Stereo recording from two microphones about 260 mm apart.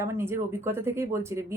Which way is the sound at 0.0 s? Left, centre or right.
Centre.